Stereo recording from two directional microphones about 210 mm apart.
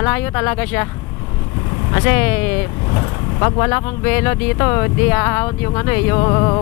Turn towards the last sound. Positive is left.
turn(degrees=20)  # may be behind; listen again after turning